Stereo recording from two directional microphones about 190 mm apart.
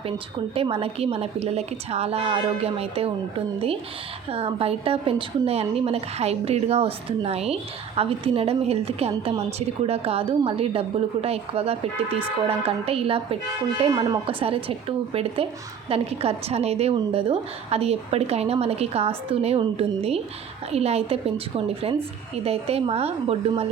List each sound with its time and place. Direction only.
0.5 s a woman's voice: 30° right (ahead or behind)